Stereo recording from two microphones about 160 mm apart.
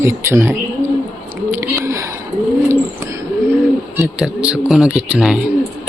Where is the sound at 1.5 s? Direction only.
15° right (ahead or behind).